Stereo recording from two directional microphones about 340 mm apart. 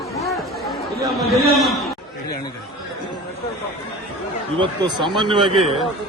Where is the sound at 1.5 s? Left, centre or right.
Centre.